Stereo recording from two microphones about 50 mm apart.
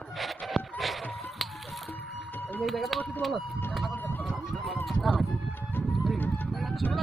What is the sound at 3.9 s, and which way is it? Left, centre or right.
Run, left.